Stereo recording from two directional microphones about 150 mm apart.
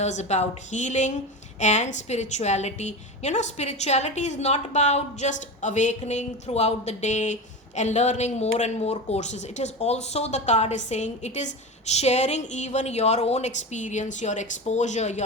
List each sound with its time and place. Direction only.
0.0 s speech: 50° left (ahead or behind)